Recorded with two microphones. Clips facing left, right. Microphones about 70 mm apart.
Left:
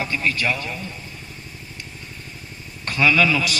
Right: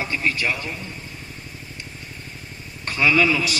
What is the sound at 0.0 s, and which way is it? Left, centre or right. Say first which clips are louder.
Speech: left 1 dB; right.